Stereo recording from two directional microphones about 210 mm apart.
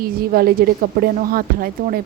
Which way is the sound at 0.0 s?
45° right (ahead or behind).